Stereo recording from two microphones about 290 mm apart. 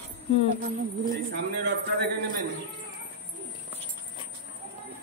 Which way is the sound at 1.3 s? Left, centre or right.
Right.